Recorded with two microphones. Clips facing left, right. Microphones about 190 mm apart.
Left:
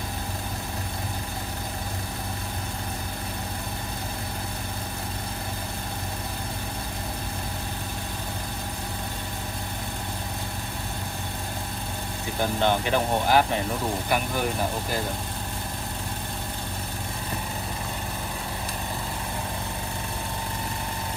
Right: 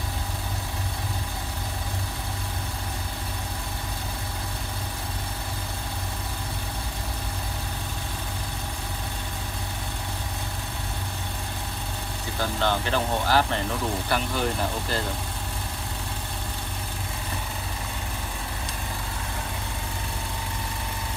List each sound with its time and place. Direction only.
12.4 s speech: 15° left (ahead or behind)